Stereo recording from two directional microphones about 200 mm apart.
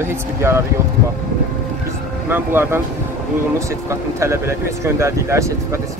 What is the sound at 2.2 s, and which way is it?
Speech, 10° right (ahead or behind).